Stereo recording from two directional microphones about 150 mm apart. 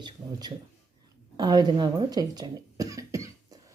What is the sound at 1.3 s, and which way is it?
Cough, 25° right (ahead or behind).